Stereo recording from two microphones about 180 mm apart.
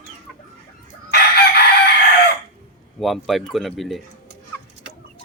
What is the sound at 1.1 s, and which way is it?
Chicken, 60° left (ahead or behind).